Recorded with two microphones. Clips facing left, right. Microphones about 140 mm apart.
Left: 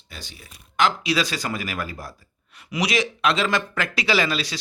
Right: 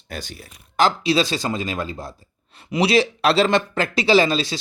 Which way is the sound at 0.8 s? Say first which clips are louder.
Right 4 dB; 30° right (ahead or behind).